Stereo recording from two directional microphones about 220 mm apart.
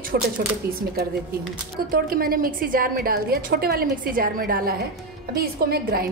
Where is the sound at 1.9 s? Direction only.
40° right (ahead or behind).